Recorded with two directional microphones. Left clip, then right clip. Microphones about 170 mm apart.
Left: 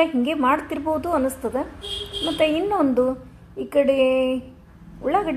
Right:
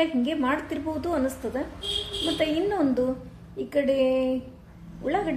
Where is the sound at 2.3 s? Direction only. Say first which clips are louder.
Left 6 dB; 15° left (ahead or behind).